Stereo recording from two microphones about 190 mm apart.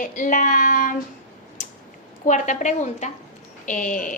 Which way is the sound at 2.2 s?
40° left (ahead or behind).